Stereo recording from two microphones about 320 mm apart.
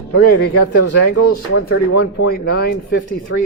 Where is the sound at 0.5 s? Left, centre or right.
Left.